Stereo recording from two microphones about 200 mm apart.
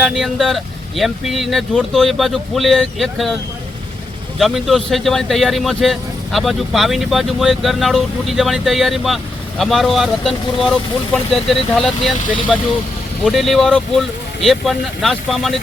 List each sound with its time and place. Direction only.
0.0 s speech: centre (ahead or behind)
4.4 s speech: centre (ahead or behind)